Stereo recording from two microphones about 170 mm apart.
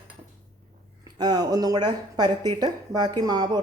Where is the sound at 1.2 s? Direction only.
25° right (ahead or behind).